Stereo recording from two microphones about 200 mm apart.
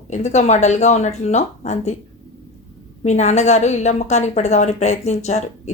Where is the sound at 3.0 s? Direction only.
35° left (ahead or behind).